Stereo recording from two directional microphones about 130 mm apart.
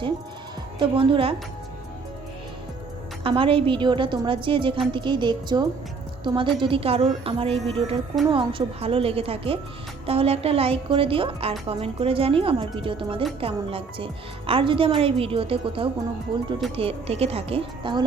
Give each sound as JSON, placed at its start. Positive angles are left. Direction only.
{"t": 0.8, "sound": "a woman's voice", "side_deg": -40}
{"t": 3.2, "sound": "a woman's voice", "side_deg": -45}